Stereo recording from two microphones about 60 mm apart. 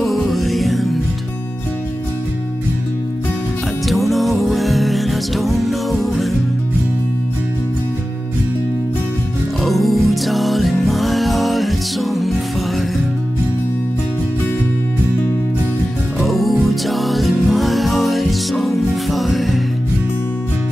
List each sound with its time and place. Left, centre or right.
0.0 s music: centre
3.8 s music: centre
9.6 s music: centre
16.2 s music: centre